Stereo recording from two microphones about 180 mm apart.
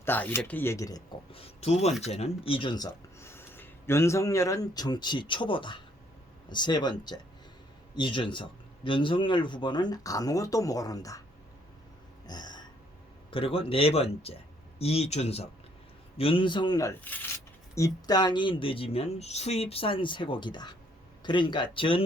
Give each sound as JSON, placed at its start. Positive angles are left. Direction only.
{"t": 0.0, "sound": "speech", "side_deg": 10}
{"t": 12.3, "sound": "a sound", "side_deg": 25}
{"t": 13.3, "sound": "a man's voice", "side_deg": 30}